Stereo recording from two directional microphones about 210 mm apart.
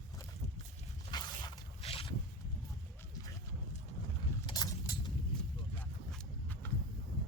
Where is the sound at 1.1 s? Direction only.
20° left (ahead or behind).